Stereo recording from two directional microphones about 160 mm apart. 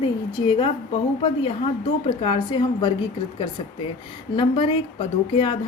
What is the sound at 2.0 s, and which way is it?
Speech, 30° left (ahead or behind).